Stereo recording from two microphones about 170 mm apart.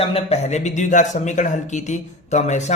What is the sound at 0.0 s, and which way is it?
Speech, 35° left (ahead or behind).